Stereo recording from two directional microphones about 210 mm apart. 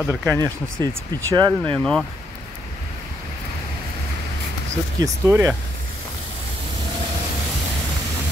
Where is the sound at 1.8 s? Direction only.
5° left (ahead or behind).